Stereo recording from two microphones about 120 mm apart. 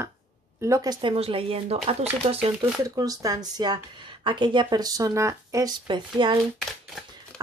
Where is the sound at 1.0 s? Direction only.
50° right (ahead or behind).